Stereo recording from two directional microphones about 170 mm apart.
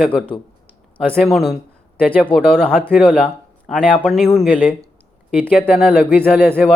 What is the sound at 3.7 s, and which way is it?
Speech, centre (ahead or behind).